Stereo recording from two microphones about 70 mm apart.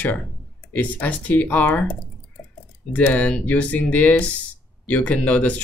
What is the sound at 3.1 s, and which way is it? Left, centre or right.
Speech, centre.